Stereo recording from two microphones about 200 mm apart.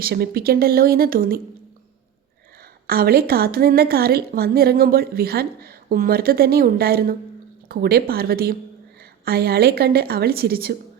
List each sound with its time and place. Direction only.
0.0 s a woman's voice: 50° right (ahead or behind)
2.8 s a woman's voice: 50° right (ahead or behind)